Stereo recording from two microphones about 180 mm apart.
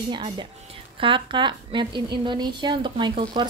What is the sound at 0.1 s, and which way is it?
A woman's voice, 25° right (ahead or behind).